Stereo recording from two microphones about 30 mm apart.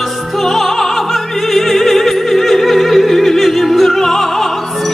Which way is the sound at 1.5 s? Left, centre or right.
Centre.